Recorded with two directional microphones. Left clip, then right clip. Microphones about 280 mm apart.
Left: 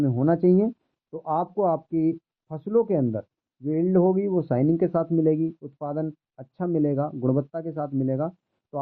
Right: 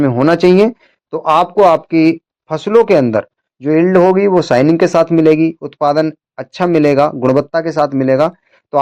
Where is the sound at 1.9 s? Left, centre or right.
Right.